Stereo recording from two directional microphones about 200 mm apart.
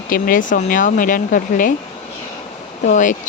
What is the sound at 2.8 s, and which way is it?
Speech, 40° left (ahead or behind).